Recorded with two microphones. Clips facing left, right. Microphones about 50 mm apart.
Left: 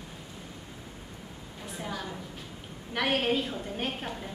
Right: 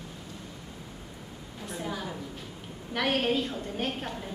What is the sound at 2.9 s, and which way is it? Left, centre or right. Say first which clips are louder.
A woman's voice: even; centre.